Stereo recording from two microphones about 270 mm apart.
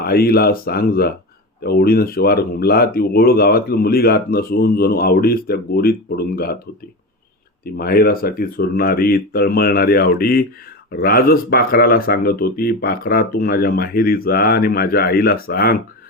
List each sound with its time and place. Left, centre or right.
0.0 s speech: left
7.6 s speech: left